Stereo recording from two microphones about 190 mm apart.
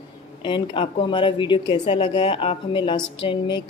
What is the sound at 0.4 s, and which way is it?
Speech, 25° left (ahead or behind).